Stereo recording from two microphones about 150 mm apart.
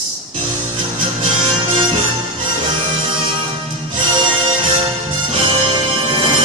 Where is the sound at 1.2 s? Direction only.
35° right (ahead or behind).